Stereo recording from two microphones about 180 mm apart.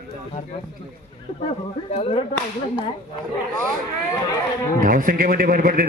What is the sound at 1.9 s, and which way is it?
Speech, 35° left (ahead or behind).